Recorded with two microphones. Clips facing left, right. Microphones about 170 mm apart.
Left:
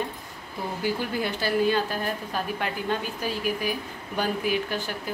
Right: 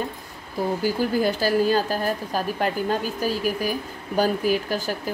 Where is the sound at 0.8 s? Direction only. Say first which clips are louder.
Right 4 dB; 40° right (ahead or behind).